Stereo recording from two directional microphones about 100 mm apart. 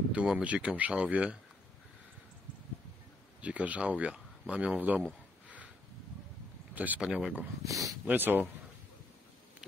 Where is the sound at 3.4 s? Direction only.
15° right (ahead or behind).